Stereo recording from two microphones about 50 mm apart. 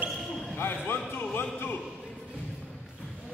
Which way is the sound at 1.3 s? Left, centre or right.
Left.